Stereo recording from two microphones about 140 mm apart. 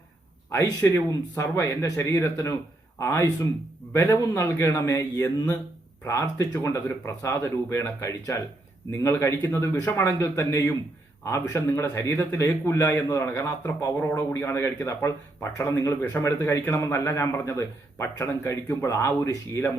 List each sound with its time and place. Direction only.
0.8 s a man's voice: 15° left (ahead or behind)